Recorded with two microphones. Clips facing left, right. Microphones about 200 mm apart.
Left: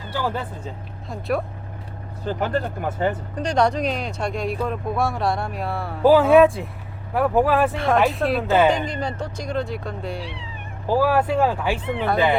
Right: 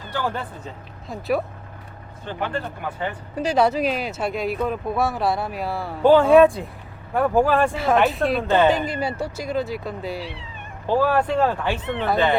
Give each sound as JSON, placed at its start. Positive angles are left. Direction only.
{"t": 0.1, "sound": "speech", "side_deg": 5}
{"t": 2.2, "sound": "speech", "side_deg": 40}
{"t": 3.3, "sound": "speech", "side_deg": -5}
{"t": 8.7, "sound": "speech", "side_deg": -5}
{"t": 10.8, "sound": "speech", "side_deg": 10}